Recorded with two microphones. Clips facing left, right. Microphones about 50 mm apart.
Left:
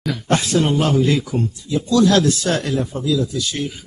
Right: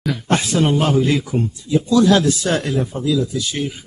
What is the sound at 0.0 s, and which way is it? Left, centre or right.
Speech, centre.